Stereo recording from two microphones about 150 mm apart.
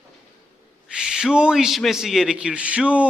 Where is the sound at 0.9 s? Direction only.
5° right (ahead or behind).